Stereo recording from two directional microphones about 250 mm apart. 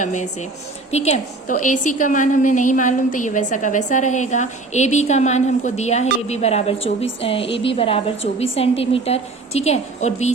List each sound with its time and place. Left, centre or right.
0.0 s a woman's voice: left